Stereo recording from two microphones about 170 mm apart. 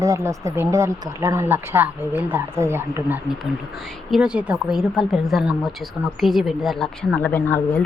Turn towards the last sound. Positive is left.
turn(degrees=10)  # may be behind; listen again after turning